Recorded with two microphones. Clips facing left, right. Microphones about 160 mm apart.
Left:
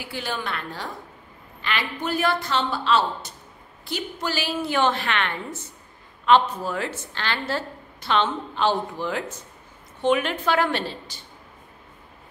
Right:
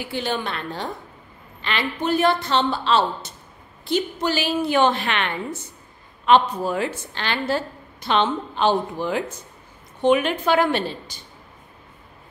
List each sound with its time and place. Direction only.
0.1 s a woman's voice: 25° right (ahead or behind)